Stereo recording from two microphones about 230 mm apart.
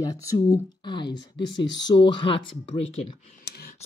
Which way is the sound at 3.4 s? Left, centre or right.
Left.